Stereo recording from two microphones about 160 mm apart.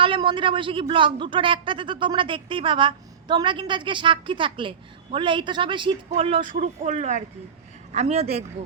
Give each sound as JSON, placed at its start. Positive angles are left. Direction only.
{"t": 0.0, "sound": "a man's voice", "side_deg": -30}
{"t": 6.4, "sound": "a man's voice", "side_deg": -50}